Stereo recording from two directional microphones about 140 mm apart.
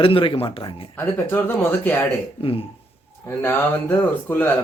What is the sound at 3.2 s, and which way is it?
Speech, 15° left (ahead or behind).